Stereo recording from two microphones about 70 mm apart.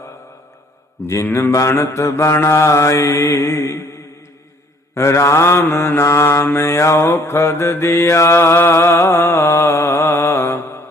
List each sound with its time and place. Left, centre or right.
1.0 s mantra: left
4.9 s mantra: left